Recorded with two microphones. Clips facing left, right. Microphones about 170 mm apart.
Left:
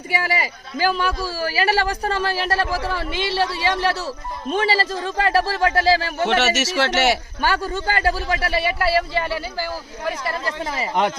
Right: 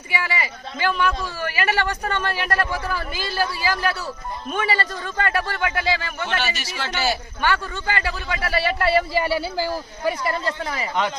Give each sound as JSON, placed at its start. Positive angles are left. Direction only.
{"t": 0.1, "sound": "a man's voice", "side_deg": 40}
{"t": 6.2, "sound": "speech", "side_deg": 80}
{"t": 7.4, "sound": "a man's voice", "side_deg": 35}
{"t": 8.6, "sound": "a man's voice", "side_deg": 0}
{"t": 10.6, "sound": "a man's voice", "side_deg": 25}